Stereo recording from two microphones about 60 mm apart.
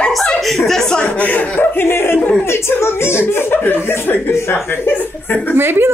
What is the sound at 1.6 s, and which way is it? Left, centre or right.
Speech, left.